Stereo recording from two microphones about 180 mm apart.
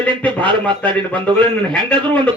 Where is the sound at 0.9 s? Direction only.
25° right (ahead or behind).